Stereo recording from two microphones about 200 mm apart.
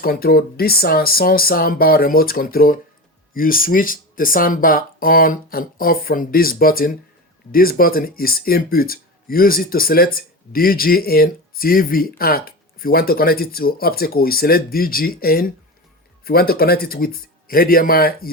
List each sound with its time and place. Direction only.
0.0 s speech: 50° left (ahead or behind)